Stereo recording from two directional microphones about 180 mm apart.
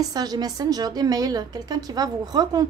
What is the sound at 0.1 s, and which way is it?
A woman's voice, 20° right (ahead or behind).